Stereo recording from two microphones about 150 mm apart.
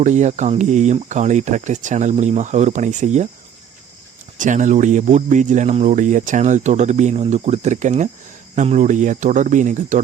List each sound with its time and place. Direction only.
0.0 s speech: 50° right (ahead or behind)
4.4 s speech: 55° right (ahead or behind)